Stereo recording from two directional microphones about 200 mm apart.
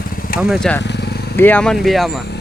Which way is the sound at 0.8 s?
55° left (ahead or behind).